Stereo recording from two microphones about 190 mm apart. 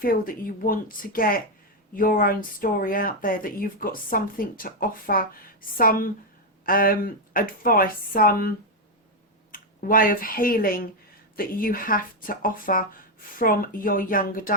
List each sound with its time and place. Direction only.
0.0 s speech: 50° left (ahead or behind)